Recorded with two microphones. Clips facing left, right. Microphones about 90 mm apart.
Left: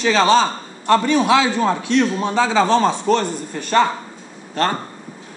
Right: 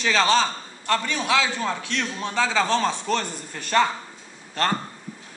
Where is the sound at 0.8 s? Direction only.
15° left (ahead or behind).